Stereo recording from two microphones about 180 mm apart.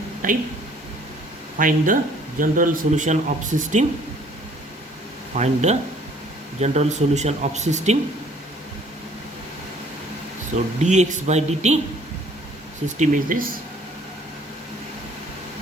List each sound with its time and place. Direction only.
0.2 s speech: 50° right (ahead or behind)
1.5 s speech: 50° right (ahead or behind)
5.3 s speech: 40° right (ahead or behind)
10.8 s speech: 40° right (ahead or behind)
13.0 s speech: 50° right (ahead or behind)